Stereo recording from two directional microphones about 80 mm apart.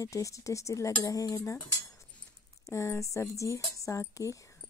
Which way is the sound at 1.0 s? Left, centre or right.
Left.